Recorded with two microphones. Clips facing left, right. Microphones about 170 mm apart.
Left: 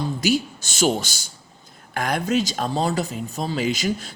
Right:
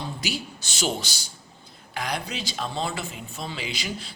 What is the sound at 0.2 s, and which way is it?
Speech, 45° left (ahead or behind).